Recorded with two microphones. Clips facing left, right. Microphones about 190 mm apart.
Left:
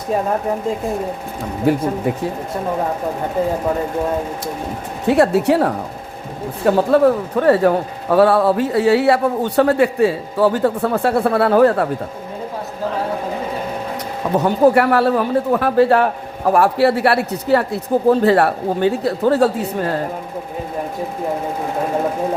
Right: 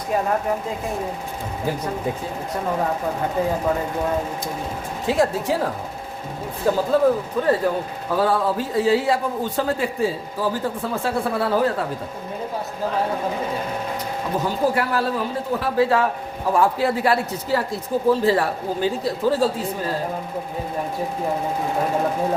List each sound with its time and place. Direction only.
2.1 s a man's voice: 70° left (ahead or behind)
5.0 s a man's voice: 70° left (ahead or behind)
14.3 s a man's voice: 65° left (ahead or behind)